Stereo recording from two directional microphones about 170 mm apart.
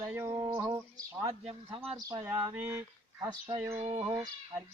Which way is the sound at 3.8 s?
30° right (ahead or behind).